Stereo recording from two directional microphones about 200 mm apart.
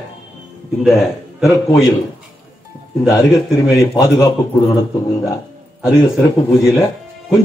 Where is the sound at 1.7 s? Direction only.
15° left (ahead or behind).